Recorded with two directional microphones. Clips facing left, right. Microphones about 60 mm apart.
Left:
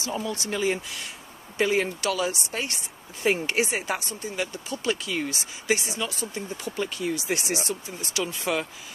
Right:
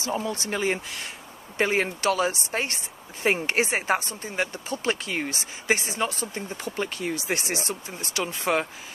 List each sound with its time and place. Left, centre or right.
0.0 s speech: right